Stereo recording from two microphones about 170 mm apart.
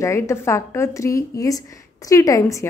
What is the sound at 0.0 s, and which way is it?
A woman's voice, 15° left (ahead or behind).